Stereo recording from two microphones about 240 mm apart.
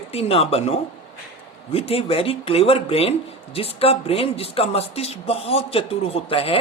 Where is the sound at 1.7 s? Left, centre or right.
Left.